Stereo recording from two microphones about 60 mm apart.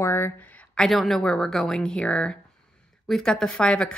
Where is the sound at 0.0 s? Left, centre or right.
Left.